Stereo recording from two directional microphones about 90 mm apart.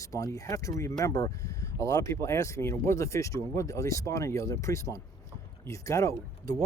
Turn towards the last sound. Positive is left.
turn(degrees=35)  # may be behind; listen again after turning